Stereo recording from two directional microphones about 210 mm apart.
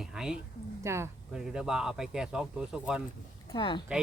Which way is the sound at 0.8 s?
15° right (ahead or behind).